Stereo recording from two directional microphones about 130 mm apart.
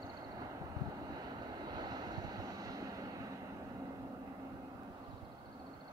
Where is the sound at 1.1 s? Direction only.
30° right (ahead or behind).